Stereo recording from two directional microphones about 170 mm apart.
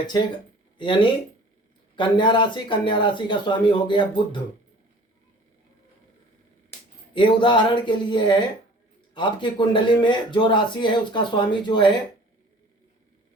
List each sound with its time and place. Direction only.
0.8 s speech: 30° left (ahead or behind)
7.1 s speech: 30° left (ahead or behind)